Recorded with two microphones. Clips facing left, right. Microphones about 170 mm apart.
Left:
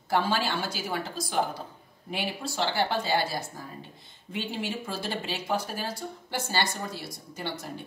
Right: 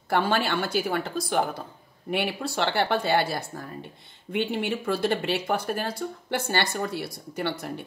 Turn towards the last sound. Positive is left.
turn(degrees=-60)  # may be behind; listen again after turning